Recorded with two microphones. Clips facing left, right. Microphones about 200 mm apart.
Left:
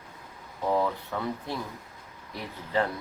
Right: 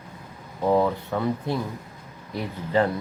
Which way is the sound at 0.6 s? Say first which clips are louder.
Right 6 dB; 25° right (ahead or behind).